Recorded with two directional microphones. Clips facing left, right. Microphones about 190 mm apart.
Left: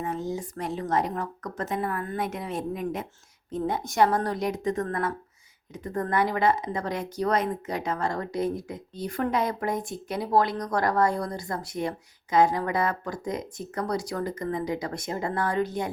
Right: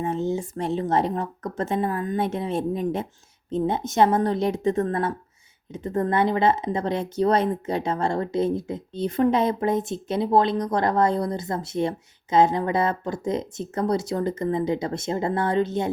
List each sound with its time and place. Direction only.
0.0 s speech: 25° right (ahead or behind)